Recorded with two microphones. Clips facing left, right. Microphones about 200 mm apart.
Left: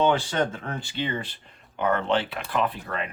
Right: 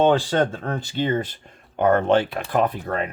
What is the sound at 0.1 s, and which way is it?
Speech, 35° right (ahead or behind).